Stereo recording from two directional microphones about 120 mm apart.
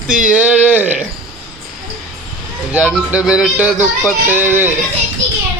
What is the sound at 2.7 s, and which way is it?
Speech, 10° right (ahead or behind).